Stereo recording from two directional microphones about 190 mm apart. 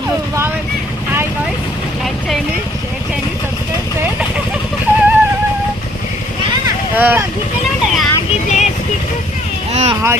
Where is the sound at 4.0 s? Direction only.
5° right (ahead or behind).